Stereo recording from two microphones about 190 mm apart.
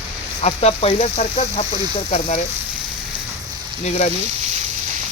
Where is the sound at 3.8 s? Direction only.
35° left (ahead or behind).